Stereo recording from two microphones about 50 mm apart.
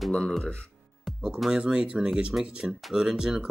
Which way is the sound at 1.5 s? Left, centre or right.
Centre.